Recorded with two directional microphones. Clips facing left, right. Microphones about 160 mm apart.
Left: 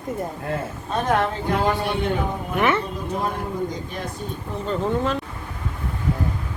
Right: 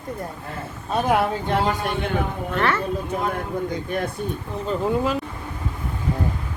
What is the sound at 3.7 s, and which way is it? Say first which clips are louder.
Speech: right 5 dB; 60° right (ahead or behind).